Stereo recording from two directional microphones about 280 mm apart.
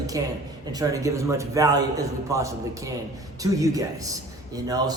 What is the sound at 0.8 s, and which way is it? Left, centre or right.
A man's voice, centre.